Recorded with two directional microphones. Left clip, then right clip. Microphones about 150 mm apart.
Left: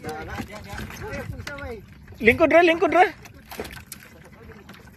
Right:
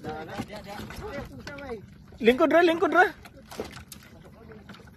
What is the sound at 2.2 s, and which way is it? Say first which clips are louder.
Speech: left 4 dB; 5° left (ahead or behind).